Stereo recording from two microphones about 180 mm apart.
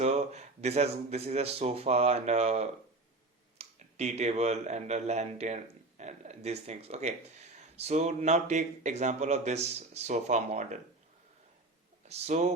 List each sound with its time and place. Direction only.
0.0 s speech: 35° right (ahead or behind)
12.0 s speech: 35° right (ahead or behind)